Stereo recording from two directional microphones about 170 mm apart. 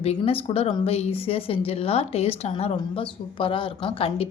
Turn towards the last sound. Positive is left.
turn(degrees=35)  # may be behind; listen again after turning